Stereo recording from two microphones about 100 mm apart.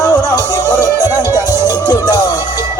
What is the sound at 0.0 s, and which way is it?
Music, 40° left (ahead or behind).